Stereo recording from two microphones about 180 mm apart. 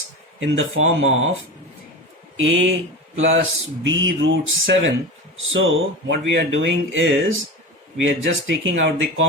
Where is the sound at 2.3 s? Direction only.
90° right.